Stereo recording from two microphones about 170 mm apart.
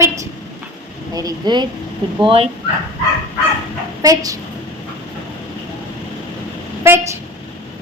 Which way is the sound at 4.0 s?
20° right (ahead or behind).